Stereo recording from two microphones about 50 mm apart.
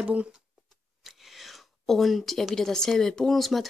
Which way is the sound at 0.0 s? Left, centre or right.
Right.